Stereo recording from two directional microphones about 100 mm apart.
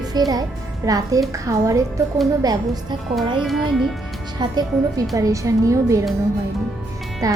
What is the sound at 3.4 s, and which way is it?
Music, centre (ahead or behind).